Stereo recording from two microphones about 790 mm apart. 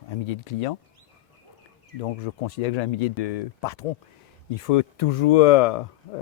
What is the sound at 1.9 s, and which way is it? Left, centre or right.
Speech, left.